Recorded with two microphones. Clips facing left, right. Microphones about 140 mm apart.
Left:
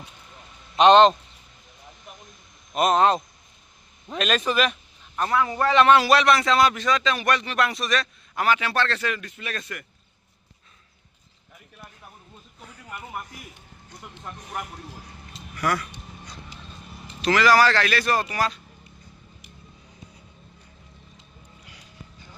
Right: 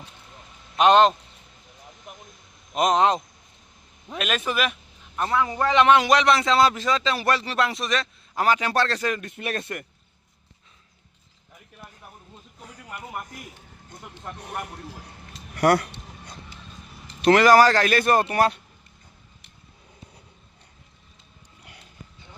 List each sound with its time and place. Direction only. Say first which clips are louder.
0.8 s speech: left 2 dB; 5° right (ahead or behind)
2.7 s a man's voice: left 1 dB; 15° right (ahead or behind)
8.4 s speech: right 1 dB; 40° right (ahead or behind)
9.3 s speech: right 5 dB; 60° right (ahead or behind)
15.5 s a sound: right 7 dB; 70° right (ahead or behind)
17.2 s speech: right 4 dB; 55° right (ahead or behind)